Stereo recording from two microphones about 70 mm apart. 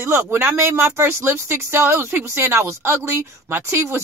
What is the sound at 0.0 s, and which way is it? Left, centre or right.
Speech, right.